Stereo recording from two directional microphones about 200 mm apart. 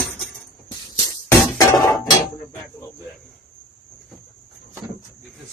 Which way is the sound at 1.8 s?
20° left (ahead or behind).